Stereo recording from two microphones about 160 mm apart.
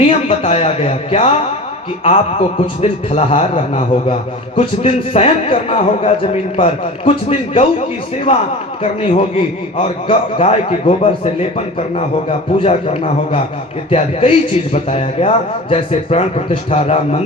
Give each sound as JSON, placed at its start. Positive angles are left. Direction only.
{"t": 0.0, "sound": "a man's voice", "side_deg": 35}
{"t": 2.6, "sound": "a man's voice", "side_deg": 40}